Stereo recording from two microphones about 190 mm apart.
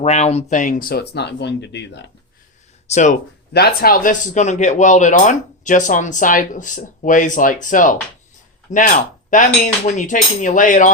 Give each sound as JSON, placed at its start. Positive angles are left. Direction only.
{"t": 0.0, "sound": "speech", "side_deg": 35}
{"t": 0.5, "sound": "speech", "side_deg": 45}
{"t": 2.8, "sound": "speech", "side_deg": 40}
{"t": 3.5, "sound": "speech", "side_deg": 55}
{"t": 8.7, "sound": "dishes", "side_deg": 45}